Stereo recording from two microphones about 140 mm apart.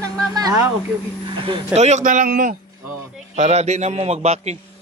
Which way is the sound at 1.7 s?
55° right (ahead or behind).